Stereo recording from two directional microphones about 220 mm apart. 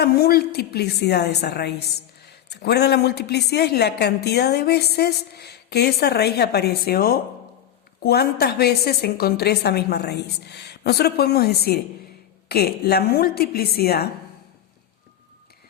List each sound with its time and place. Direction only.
0.0 s a woman's voice: 45° left (ahead or behind)